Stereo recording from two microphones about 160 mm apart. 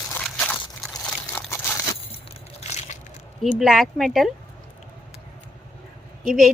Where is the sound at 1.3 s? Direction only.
15° left (ahead or behind).